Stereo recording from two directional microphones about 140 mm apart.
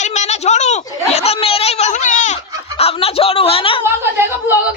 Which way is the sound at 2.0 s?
65° left (ahead or behind).